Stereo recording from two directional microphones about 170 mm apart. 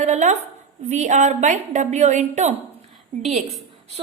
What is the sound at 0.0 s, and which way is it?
A woman's voice, 45° right (ahead or behind).